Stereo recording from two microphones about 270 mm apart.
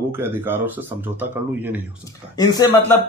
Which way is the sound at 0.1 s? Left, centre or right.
Centre.